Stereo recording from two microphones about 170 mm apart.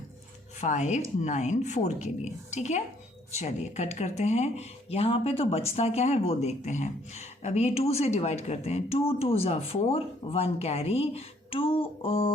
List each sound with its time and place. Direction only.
0.6 s speech: 45° left (ahead or behind)